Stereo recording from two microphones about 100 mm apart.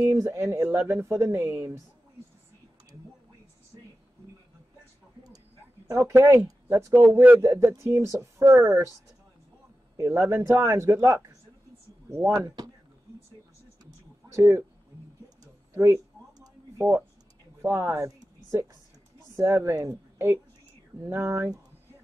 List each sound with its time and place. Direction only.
0.0 s a sound: 25° right (ahead or behind)
0.8 s speech: 30° right (ahead or behind)
5.9 s speech: 30° right (ahead or behind)
9.9 s speech: 30° right (ahead or behind)
12.3 s speech: 40° right (ahead or behind)
13.8 s a sound: 30° right (ahead or behind)
15.7 s a woman's voice: 25° right (ahead or behind)